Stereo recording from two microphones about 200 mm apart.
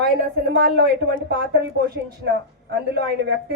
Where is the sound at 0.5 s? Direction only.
60° right (ahead or behind).